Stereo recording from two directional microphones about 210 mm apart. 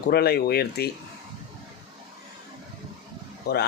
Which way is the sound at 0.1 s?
50° left (ahead or behind).